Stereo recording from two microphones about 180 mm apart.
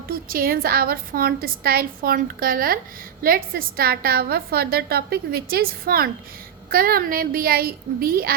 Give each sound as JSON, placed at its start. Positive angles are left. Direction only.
{"t": 0.1, "sound": "a woman's voice", "side_deg": -55}